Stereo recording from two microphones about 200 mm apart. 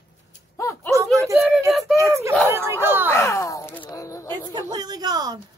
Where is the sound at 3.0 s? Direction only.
15° left (ahead or behind).